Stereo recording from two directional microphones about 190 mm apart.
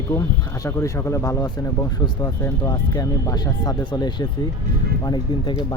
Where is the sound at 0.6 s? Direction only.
15° left (ahead or behind).